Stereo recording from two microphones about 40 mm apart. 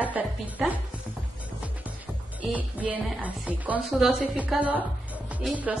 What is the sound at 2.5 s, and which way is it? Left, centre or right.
A woman's voice, right.